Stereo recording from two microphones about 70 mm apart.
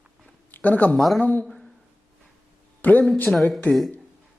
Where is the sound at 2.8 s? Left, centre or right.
Left.